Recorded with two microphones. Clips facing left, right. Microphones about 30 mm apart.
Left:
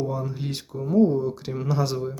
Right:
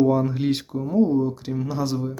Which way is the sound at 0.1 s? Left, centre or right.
Right.